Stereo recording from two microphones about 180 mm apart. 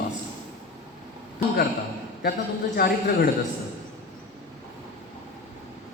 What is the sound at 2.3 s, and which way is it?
Speech, 50° left (ahead or behind).